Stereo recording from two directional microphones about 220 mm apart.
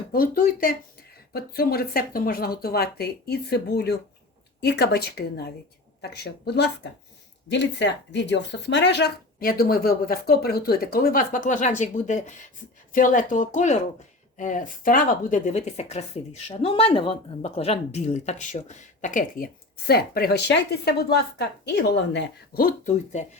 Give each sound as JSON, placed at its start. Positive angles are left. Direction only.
{"t": 0.1, "sound": "speech", "side_deg": 40}